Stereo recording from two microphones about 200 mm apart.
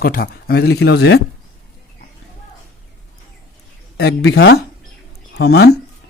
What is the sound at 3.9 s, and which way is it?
Speech, 55° left (ahead or behind).